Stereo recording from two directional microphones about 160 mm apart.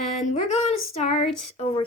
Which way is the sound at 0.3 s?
45° left (ahead or behind).